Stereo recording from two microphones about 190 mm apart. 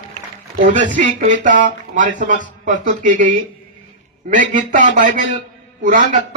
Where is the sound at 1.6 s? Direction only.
45° right (ahead or behind).